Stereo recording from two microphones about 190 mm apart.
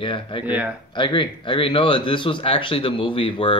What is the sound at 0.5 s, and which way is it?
Speech, 10° right (ahead or behind).